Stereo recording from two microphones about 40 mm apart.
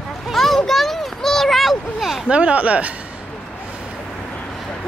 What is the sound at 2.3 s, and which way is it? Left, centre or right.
Speech, right.